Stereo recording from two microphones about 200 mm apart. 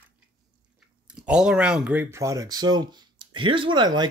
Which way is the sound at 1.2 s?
5° right (ahead or behind).